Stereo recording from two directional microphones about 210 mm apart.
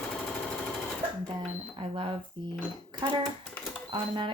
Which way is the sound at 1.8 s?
25° right (ahead or behind).